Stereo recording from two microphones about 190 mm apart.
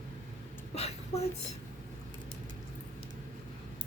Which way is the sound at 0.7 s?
35° left (ahead or behind).